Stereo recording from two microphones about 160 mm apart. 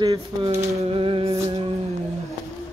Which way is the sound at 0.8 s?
35° right (ahead or behind).